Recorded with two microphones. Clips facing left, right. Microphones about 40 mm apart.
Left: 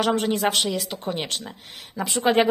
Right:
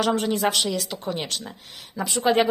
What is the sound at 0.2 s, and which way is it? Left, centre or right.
A woman's voice, left.